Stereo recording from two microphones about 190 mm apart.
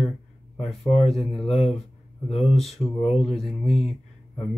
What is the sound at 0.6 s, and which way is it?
Speech, 35° left (ahead or behind).